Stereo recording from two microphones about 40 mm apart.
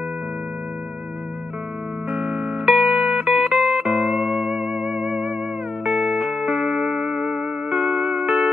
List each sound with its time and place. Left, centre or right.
2.0 s music: centre
2.6 s music: centre
6.3 s music: centre